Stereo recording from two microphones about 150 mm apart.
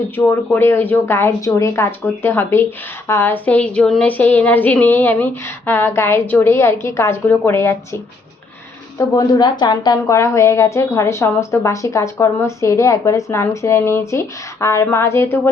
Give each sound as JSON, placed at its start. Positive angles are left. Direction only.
{"t": 0.3, "sound": "speech", "side_deg": 15}
{"t": 9.0, "sound": "a woman's voice", "side_deg": 25}